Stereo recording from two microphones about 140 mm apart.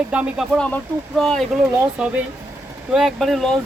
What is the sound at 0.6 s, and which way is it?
Speech, 5° left (ahead or behind).